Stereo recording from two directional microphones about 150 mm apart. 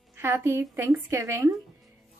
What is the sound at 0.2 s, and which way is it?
A woman's voice, 15° right (ahead or behind).